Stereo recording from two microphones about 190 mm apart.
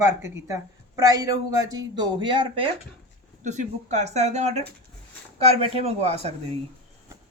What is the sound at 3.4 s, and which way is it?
Speech, 40° right (ahead or behind).